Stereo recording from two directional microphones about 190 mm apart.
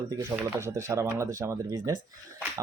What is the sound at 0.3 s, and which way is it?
Speech, 15° right (ahead or behind).